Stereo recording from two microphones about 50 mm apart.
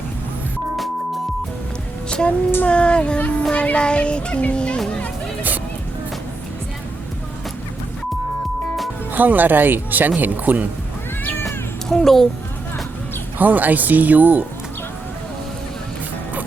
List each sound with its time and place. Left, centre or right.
2.0 s music: centre
2.6 s a sound: left
3.5 s speech: left
9.1 s speech: right
11.2 s cat: left
11.4 s meow: centre
13.4 s speech: right